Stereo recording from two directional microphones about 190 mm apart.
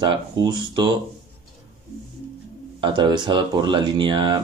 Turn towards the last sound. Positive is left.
turn(degrees=-25)  # may be behind; listen again after turning